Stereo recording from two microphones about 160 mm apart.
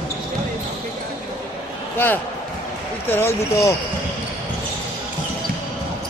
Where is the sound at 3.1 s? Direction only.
15° left (ahead or behind).